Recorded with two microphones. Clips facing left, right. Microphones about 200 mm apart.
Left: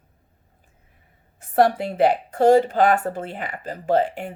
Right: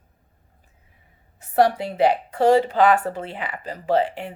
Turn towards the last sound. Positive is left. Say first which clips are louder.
# left 1 dB
turn(degrees=45)  # may be behind; listen again after turning